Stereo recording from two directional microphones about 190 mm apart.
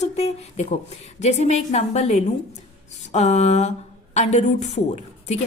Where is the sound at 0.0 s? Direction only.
35° left (ahead or behind).